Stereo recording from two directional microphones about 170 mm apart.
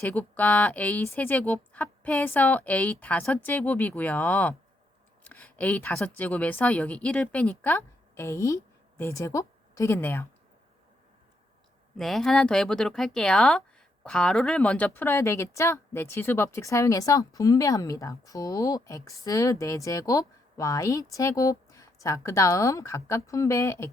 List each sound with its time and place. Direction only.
0.0 s a woman's voice: 10° left (ahead or behind)
11.9 s a woman's voice: centre (ahead or behind); by 23.9 s 15° left (ahead or behind)